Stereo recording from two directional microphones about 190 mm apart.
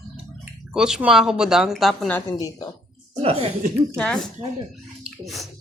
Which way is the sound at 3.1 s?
30° right (ahead or behind).